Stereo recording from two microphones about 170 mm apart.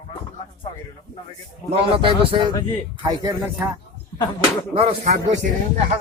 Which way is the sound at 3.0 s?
25° right (ahead or behind).